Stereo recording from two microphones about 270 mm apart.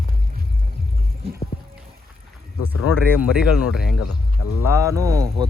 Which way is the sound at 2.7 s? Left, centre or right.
Left.